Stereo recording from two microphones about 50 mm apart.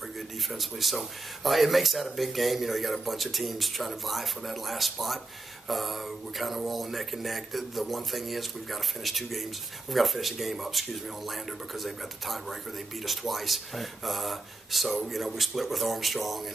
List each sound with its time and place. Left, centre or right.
0.5 s speech: centre